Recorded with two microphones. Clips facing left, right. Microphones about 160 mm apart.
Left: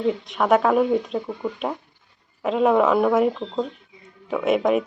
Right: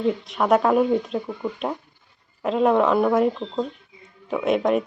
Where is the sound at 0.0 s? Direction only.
Centre (ahead or behind).